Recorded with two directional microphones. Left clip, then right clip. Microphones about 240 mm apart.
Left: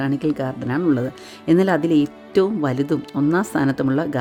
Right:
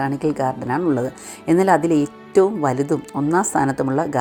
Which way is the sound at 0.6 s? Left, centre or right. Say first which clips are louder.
Even; left.